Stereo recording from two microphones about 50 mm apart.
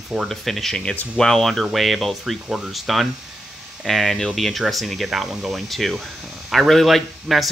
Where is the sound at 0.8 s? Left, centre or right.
Left.